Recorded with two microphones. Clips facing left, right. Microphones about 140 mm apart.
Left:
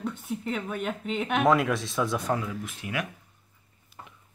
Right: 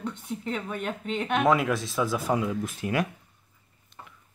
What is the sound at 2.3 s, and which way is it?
Speech, 20° right (ahead or behind).